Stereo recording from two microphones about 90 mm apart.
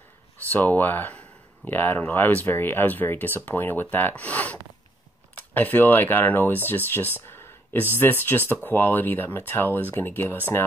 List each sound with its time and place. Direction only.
0.5 s speech: 20° left (ahead or behind)